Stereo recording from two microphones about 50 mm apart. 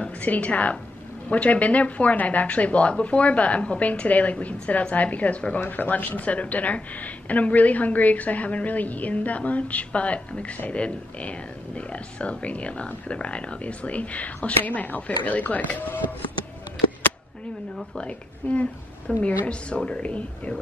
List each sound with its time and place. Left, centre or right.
0.2 s a woman's voice: left
5.6 s a woman's voice: left
17.9 s a woman's voice: left